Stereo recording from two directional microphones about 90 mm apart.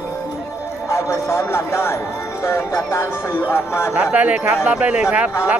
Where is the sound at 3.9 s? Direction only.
10° right (ahead or behind).